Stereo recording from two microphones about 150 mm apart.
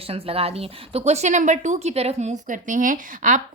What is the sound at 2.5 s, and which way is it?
Speech, 60° right (ahead or behind).